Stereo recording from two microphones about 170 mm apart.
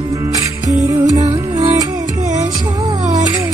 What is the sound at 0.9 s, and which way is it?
Music, 20° right (ahead or behind).